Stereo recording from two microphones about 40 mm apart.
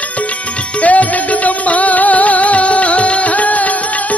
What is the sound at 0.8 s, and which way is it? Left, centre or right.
Music, left.